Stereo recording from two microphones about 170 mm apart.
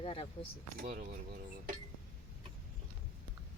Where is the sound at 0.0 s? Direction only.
30° left (ahead or behind).